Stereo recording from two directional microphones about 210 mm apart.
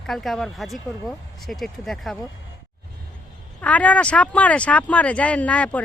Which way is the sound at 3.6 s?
5° left (ahead or behind).